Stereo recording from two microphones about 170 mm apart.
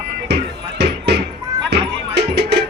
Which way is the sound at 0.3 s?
75° right (ahead or behind).